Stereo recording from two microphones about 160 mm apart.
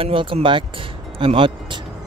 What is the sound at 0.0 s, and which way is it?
Speech, 35° right (ahead or behind).